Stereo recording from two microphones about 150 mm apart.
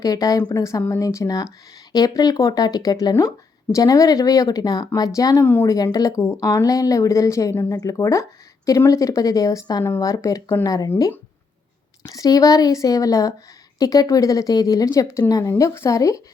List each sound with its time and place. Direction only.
0.0 s speech: 25° left (ahead or behind)